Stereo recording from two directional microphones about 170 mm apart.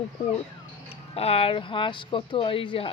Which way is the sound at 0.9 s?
35° left (ahead or behind).